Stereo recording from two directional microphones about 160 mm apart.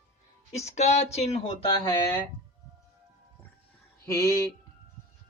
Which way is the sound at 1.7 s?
20° left (ahead or behind).